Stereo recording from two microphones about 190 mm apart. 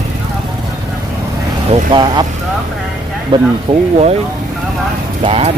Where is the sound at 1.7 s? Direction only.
25° right (ahead or behind).